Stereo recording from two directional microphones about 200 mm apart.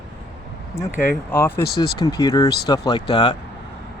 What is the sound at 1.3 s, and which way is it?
Speech, 10° left (ahead or behind).